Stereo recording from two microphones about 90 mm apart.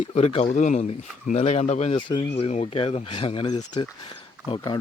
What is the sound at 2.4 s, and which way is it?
Speech, 90° left.